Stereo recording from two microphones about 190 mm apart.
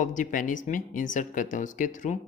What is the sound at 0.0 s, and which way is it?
Speech, 40° left (ahead or behind).